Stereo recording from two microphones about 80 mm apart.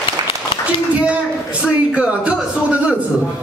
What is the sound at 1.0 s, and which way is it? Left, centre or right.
A man's voice, centre.